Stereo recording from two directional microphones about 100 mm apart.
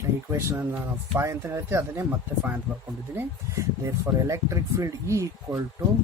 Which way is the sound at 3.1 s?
30° right (ahead or behind).